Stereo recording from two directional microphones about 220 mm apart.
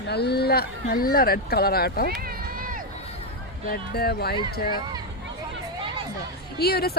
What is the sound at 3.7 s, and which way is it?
Speech, 45° left (ahead or behind).